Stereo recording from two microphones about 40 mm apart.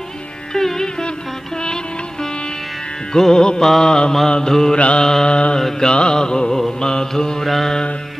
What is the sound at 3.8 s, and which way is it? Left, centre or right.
Mantra, centre.